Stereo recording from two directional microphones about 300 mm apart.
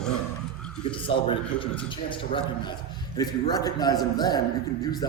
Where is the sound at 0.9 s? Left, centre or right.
Centre.